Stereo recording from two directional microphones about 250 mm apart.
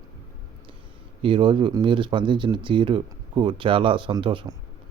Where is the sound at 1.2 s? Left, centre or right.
Centre.